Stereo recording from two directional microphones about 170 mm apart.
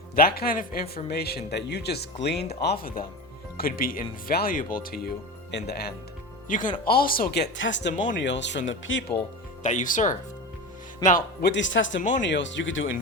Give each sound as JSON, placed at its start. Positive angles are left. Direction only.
{"t": 0.2, "sound": "speech", "side_deg": 60}
{"t": 5.5, "sound": "speech", "side_deg": 80}
{"t": 6.5, "sound": "speech", "side_deg": 50}
{"t": 9.6, "sound": "speech", "side_deg": 50}
{"t": 11.0, "sound": "speech", "side_deg": 25}
{"t": 11.4, "sound": "speech", "side_deg": 90}
{"t": 11.9, "sound": "speech", "side_deg": 45}
{"t": 12.2, "sound": "speech", "side_deg": 90}